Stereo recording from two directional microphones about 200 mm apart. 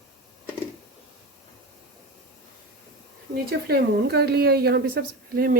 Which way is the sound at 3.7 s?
55° right (ahead or behind).